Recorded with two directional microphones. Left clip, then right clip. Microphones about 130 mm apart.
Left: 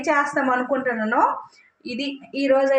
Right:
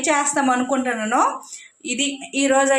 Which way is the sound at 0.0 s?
35° right (ahead or behind).